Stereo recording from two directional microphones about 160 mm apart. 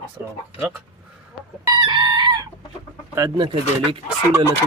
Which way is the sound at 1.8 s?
30° right (ahead or behind).